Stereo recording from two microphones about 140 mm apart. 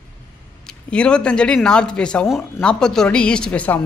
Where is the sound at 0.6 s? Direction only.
5° left (ahead or behind).